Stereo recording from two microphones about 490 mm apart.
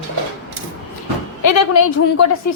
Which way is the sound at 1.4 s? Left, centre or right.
Left.